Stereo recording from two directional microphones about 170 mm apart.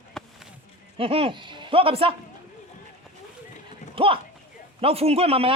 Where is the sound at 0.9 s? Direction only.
35° right (ahead or behind).